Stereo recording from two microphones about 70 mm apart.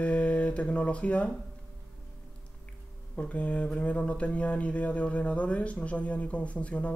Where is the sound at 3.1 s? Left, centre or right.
Centre.